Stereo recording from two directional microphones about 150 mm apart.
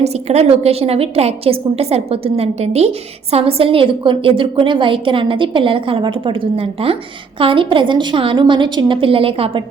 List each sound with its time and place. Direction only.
0.0 s a woman's voice: 45° right (ahead or behind)